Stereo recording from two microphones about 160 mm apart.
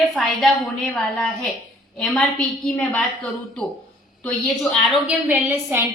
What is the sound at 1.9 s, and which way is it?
A woman's voice, 5° left (ahead or behind).